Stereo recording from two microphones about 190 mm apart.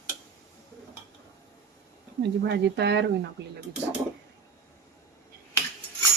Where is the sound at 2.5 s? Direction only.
65° right (ahead or behind).